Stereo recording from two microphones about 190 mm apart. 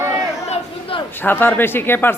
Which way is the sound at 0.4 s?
30° left (ahead or behind).